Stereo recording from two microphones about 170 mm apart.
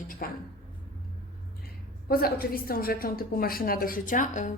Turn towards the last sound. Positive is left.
turn(degrees=50)  # may be behind; listen again after turning